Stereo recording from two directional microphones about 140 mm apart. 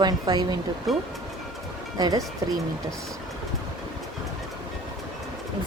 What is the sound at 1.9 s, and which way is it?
Speech, 30° right (ahead or behind).